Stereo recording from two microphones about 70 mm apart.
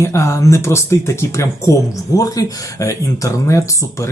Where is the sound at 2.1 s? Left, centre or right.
Left.